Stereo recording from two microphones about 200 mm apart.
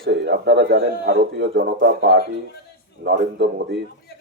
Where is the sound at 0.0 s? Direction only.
60° right (ahead or behind).